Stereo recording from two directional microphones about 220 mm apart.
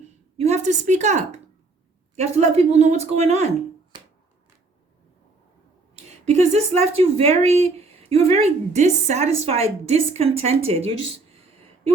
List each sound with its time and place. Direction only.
0.3 s a woman's voice: 30° right (ahead or behind)
6.1 s a woman's voice: 30° right (ahead or behind)